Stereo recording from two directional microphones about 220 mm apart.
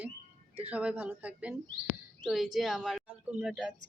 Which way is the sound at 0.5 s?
5° right (ahead or behind).